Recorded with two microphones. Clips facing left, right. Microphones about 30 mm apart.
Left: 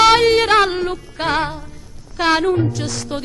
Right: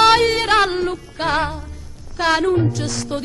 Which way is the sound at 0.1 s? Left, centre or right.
Left.